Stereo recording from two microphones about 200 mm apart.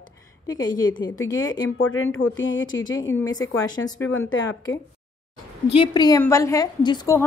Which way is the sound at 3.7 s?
20° left (ahead or behind).